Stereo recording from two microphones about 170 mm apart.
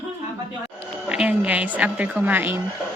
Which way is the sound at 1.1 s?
5° right (ahead or behind).